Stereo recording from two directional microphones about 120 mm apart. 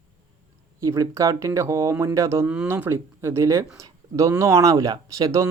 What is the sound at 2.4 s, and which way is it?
Speech, 10° right (ahead or behind).